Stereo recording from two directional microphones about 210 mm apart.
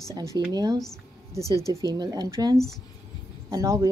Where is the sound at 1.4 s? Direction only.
15° left (ahead or behind).